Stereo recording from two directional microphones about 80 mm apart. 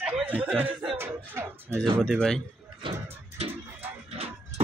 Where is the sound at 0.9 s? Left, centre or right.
Right.